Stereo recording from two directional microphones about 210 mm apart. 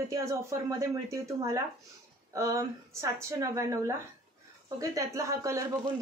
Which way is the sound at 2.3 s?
15° right (ahead or behind).